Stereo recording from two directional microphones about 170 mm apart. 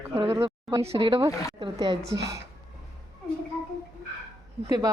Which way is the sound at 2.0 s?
90° right.